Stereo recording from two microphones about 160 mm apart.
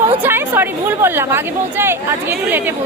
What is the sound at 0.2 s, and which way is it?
A woman's voice, 15° right (ahead or behind).